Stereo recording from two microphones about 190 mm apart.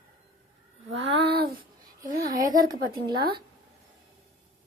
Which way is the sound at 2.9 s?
55° right (ahead or behind).